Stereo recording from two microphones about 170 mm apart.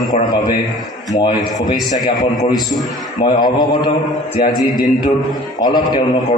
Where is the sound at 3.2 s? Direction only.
25° left (ahead or behind).